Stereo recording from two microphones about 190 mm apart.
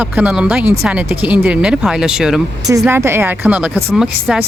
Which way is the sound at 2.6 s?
15° right (ahead or behind).